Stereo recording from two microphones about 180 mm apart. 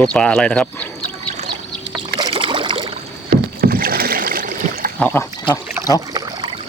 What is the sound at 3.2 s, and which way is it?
Rowboat, 55° right (ahead or behind).